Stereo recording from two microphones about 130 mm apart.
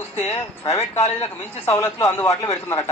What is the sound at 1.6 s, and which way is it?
A man's voice, 20° left (ahead or behind).